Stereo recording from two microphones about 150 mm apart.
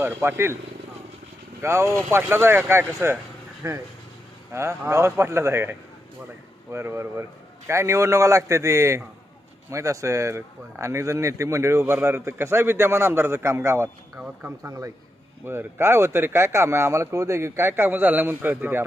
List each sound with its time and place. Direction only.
0.0 s speech: 15° right (ahead or behind)
1.6 s a man's voice: 20° right (ahead or behind)